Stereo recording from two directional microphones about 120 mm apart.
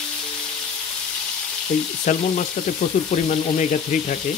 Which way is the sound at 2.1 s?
90° left.